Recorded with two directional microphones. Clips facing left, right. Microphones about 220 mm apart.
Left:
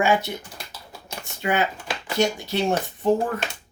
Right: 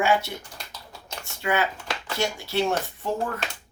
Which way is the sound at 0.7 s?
15° left (ahead or behind).